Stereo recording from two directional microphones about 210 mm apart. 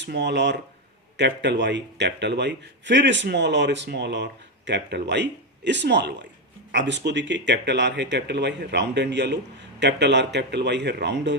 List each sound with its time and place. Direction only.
0.0 s speech: 55° right (ahead or behind)